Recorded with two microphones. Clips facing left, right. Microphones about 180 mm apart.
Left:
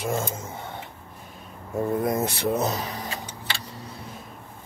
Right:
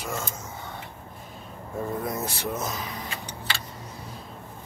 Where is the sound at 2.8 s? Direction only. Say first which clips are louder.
Left 3 dB; 35° left (ahead or behind).